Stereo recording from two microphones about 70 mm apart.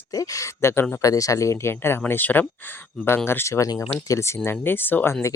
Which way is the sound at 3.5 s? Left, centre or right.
Left.